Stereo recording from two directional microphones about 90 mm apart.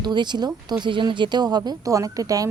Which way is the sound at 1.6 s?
35° right (ahead or behind).